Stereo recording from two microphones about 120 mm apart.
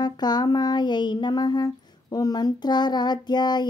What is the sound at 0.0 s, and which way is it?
Music, 35° left (ahead or behind).